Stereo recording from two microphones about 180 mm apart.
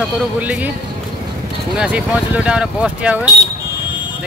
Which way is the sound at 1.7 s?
5° right (ahead or behind).